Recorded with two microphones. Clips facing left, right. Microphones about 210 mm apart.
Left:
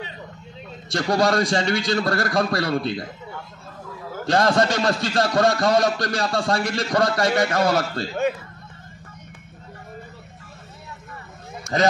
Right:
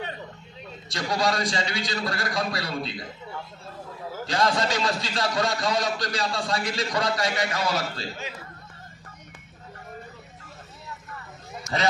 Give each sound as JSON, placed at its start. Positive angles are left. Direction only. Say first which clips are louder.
{"t": 0.9, "sound": "a man's voice", "louder": "left 6 dB", "side_deg": 50}
{"t": 4.2, "sound": "a man's voice", "louder": "left 6 dB", "side_deg": 55}
{"t": 11.6, "sound": "a sound", "louder": "left 6 dB", "side_deg": 45}